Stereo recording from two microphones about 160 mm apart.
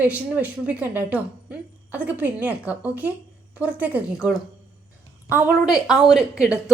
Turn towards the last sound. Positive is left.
turn(degrees=-5)  # may be behind; listen again after turning